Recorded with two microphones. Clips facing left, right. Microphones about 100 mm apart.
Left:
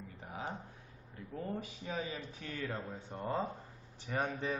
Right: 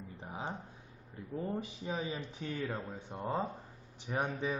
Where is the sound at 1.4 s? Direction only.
20° right (ahead or behind).